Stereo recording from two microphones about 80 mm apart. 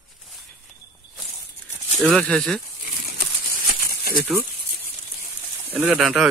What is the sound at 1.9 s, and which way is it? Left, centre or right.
Speech, centre.